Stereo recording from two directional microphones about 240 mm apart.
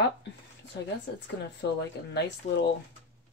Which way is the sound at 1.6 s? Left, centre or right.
Left.